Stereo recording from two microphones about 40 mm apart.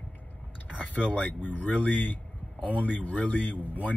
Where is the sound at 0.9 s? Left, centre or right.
Left.